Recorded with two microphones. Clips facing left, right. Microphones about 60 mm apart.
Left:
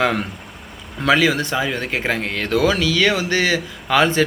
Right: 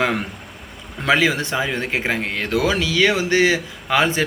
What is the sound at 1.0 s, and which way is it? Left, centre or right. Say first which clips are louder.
Speech: left 1 dB; right.